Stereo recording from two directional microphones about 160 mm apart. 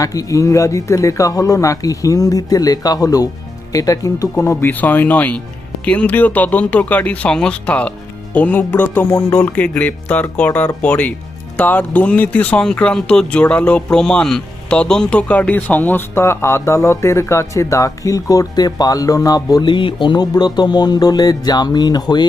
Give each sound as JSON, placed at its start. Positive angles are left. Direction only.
{"t": 0.0, "sound": "speech", "side_deg": 20}